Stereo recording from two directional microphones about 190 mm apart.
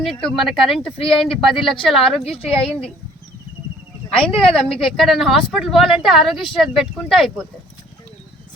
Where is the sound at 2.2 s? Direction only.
30° left (ahead or behind).